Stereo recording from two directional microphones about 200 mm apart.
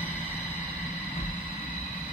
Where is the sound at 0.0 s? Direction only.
10° left (ahead or behind).